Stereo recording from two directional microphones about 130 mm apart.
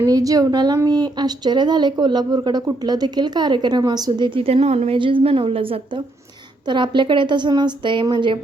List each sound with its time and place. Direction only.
0.0 s speech: 25° right (ahead or behind)
4.4 s a woman's voice: 50° right (ahead or behind)
4.9 s a woman's voice: 40° right (ahead or behind)